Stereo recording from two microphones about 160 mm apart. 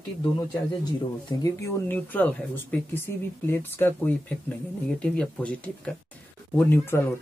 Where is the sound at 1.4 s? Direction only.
15° left (ahead or behind).